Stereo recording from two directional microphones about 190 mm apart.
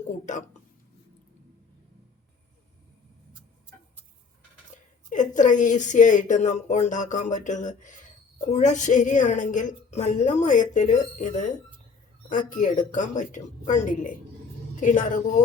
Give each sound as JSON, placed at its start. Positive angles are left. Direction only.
{"t": 0.3, "sound": "a woman's voice", "side_deg": 40}
{"t": 4.7, "sound": "a sound", "side_deg": 40}
{"t": 5.0, "sound": "a woman's voice", "side_deg": 40}